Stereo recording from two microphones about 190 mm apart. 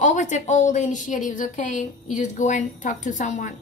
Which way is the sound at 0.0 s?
40° left (ahead or behind).